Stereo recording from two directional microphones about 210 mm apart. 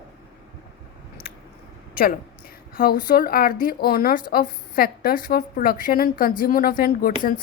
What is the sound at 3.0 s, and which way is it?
A woman's voice, 45° left (ahead or behind).